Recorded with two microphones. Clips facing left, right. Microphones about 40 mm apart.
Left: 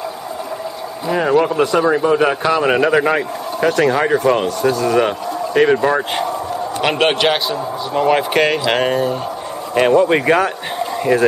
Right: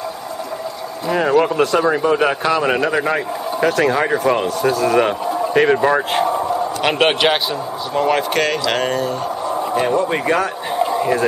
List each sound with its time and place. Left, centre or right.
1.0 s speech: centre
3.6 s speech: centre
7.9 s speech: centre
9.8 s speech: left
11.0 s speech: centre